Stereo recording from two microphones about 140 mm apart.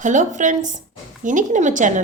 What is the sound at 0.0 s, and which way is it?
A woman's voice, 65° right (ahead or behind).